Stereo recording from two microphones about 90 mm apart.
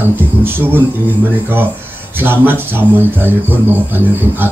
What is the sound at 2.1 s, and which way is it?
Speech, 25° right (ahead or behind).